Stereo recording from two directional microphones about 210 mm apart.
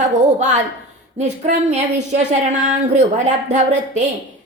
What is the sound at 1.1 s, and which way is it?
A woman's voice, 35° right (ahead or behind).